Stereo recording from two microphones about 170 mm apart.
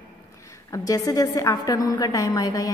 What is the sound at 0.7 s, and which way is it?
A woman's voice, 20° left (ahead or behind).